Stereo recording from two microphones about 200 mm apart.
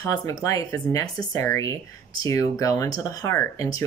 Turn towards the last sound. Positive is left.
turn(degrees=15)  # may be behind; listen again after turning